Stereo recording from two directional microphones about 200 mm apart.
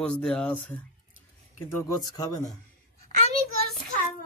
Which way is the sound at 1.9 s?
20° left (ahead or behind).